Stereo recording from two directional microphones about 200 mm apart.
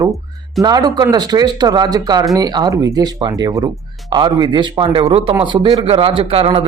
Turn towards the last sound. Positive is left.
turn(degrees=-30)  # may be behind; listen again after turning